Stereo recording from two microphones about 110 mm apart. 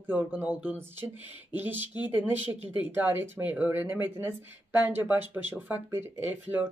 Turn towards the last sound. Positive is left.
turn(degrees=-20)  # may be behind; listen again after turning